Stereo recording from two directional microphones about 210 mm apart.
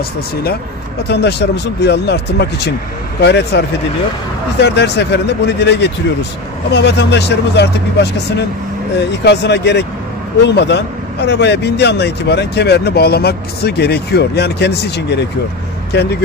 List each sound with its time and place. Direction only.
1.0 s a man's voice: 50° left (ahead or behind)